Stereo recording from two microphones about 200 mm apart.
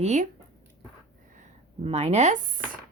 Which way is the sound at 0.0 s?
35° right (ahead or behind).